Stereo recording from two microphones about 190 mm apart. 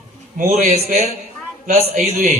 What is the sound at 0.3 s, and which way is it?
Speech, 40° right (ahead or behind).